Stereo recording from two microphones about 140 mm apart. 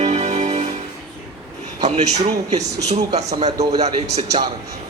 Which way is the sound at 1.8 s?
55° right (ahead or behind).